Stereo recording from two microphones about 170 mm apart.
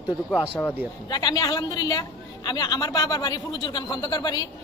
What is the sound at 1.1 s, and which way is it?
Speech, 25° left (ahead or behind).